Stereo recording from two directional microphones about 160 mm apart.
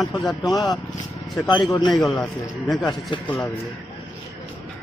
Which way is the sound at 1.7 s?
25° left (ahead or behind).